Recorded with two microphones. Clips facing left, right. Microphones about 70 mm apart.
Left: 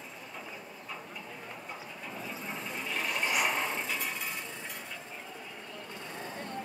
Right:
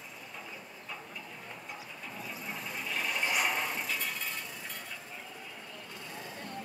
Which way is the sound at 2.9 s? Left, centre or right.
Centre.